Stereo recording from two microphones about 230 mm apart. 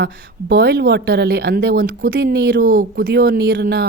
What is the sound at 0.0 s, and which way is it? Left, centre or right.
A woman's voice, right.